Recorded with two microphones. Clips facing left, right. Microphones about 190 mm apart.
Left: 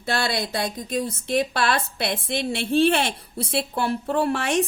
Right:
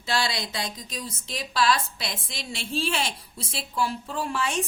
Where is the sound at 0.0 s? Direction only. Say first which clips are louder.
Left 3 dB; 55° left (ahead or behind).